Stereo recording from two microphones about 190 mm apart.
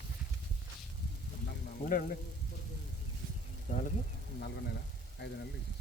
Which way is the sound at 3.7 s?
40° left (ahead or behind).